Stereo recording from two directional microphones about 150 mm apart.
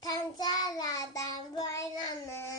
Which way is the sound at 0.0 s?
25° left (ahead or behind).